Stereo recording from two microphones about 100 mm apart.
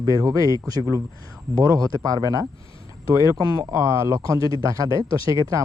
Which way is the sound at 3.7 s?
30° right (ahead or behind).